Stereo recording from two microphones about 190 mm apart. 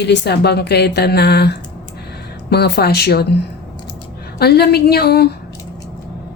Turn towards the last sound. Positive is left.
turn(degrees=55)  # may be behind; listen again after turning